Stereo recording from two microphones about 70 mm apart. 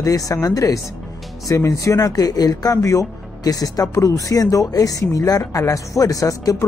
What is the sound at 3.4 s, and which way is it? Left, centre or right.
Speech, left.